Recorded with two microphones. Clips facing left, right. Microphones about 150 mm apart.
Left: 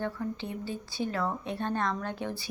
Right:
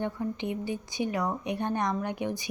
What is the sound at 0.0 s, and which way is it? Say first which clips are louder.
Speech: right 2 dB; 20° right (ahead or behind).